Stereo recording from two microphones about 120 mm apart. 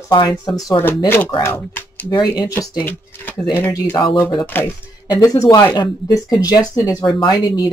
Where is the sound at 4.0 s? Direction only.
35° left (ahead or behind).